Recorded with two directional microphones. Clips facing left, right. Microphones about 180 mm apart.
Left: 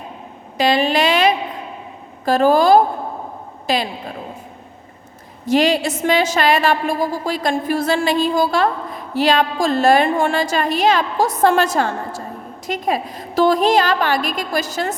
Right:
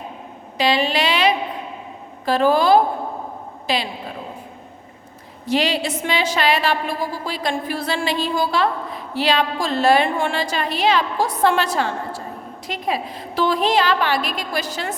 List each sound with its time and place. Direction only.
0.5 s a woman's voice: 45° left (ahead or behind)
5.5 s a woman's voice: 45° left (ahead or behind)